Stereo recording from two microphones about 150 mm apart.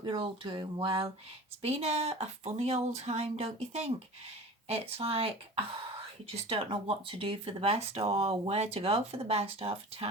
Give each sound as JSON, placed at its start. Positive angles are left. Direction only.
{"t": 0.0, "sound": "speech", "side_deg": -35}